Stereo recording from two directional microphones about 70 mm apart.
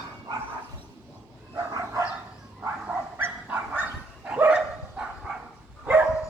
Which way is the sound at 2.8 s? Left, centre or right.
Right.